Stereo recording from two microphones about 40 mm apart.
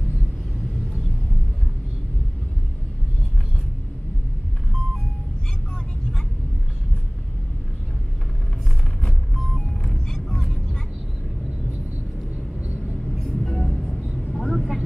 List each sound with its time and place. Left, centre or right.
9.0 s vehicle: centre
12.6 s vehicle: right
13.4 s music: centre
14.3 s vehicle: centre